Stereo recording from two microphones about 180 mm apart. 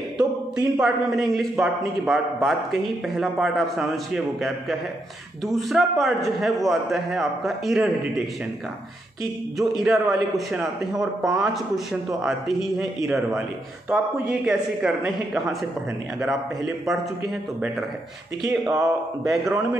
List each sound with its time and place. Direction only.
0.2 s a man's voice: 5° right (ahead or behind)
9.6 s a man's voice: centre (ahead or behind)
18.5 s speech: 20° right (ahead or behind)
19.2 s a man's voice: centre (ahead or behind)